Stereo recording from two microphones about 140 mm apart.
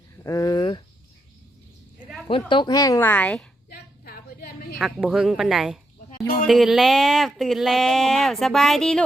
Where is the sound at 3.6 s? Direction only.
90° left.